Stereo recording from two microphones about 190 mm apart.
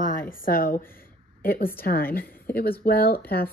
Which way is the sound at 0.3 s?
45° left (ahead or behind).